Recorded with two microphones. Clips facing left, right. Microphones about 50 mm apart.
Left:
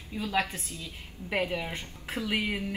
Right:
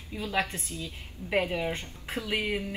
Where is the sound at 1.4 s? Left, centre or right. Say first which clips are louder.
Right 1 dB; right.